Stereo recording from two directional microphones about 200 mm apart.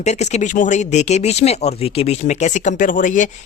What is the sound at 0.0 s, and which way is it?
Speech, 35° left (ahead or behind).